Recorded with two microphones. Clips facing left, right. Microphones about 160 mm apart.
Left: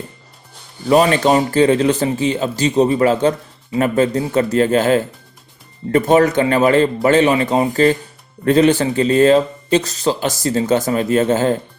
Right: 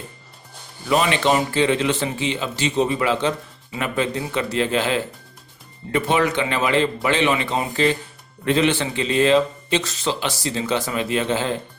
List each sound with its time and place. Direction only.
0.9 s a man's voice: 40° left (ahead or behind)